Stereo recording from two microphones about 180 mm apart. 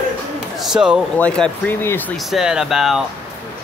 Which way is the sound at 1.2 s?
5° left (ahead or behind).